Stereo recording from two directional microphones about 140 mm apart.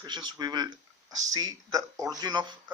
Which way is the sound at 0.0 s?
30° right (ahead or behind).